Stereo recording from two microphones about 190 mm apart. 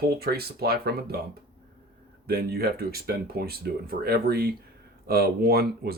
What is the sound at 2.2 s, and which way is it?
Speech, 55° right (ahead or behind).